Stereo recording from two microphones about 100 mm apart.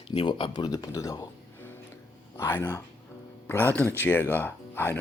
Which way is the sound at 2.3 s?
25° left (ahead or behind).